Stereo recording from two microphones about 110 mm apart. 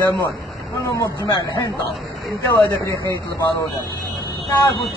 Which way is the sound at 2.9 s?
30° left (ahead or behind).